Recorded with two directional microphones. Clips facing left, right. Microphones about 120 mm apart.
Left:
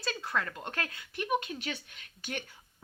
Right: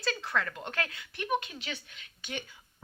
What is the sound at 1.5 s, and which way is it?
Speech, 45° left (ahead or behind).